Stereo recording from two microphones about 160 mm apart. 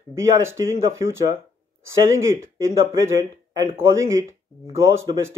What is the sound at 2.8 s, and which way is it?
Speech, 20° right (ahead or behind).